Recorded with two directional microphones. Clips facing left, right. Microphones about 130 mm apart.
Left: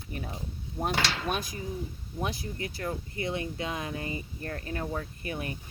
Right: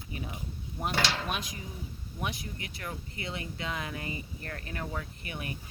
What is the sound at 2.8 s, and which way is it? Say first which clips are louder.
Speech: left 6 dB; 30° left (ahead or behind).